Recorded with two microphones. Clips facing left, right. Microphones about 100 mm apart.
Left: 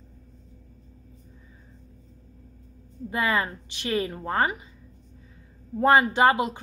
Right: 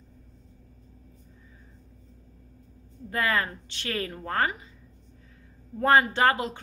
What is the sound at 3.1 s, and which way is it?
Speech, 15° left (ahead or behind).